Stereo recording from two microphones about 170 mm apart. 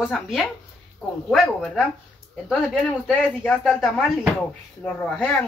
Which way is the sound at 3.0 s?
5° left (ahead or behind).